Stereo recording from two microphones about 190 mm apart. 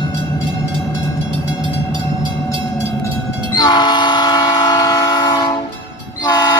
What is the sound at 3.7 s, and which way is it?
Train, 25° left (ahead or behind).